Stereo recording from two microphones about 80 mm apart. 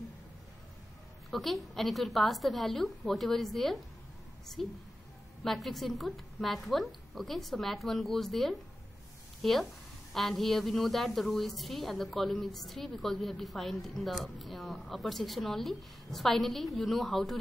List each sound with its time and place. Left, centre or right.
1.3 s a woman's voice: centre